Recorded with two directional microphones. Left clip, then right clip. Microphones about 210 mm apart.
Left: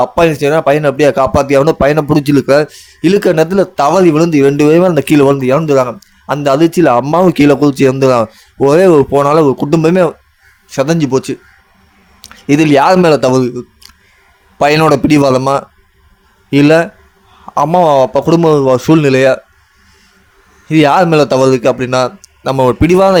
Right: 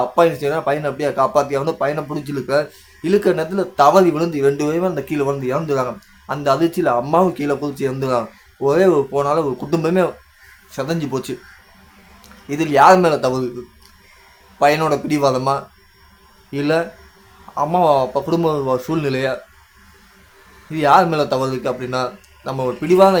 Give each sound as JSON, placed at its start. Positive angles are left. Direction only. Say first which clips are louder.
{"t": 0.0, "sound": "speech", "louder": "left 6 dB", "side_deg": 40}
{"t": 20.7, "sound": "speech", "louder": "left 5 dB", "side_deg": 40}